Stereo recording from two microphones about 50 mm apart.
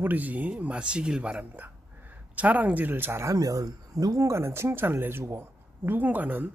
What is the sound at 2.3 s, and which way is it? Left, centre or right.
Speech, right.